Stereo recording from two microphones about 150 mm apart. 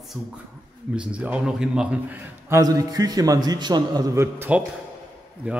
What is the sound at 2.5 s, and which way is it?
A man's voice, 25° right (ahead or behind).